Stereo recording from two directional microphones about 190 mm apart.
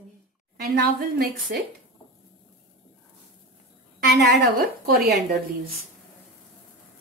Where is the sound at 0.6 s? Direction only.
55° right (ahead or behind).